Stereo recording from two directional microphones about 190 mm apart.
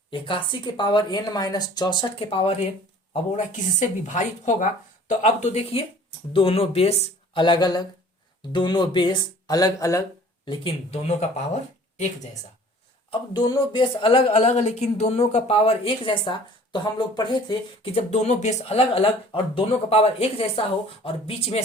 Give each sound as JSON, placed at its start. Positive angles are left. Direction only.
{"t": 0.1, "sound": "speech", "side_deg": 25}
{"t": 13.1, "sound": "speech", "side_deg": 20}